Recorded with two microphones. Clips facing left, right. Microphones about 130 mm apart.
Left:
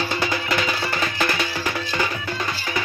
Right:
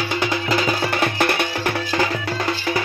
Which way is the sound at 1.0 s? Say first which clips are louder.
Right 4 dB; 60° right (ahead or behind).